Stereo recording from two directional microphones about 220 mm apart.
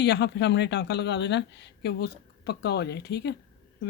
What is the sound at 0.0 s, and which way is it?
Speech, 50° left (ahead or behind).